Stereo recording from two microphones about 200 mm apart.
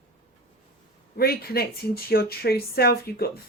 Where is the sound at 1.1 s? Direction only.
50° left (ahead or behind).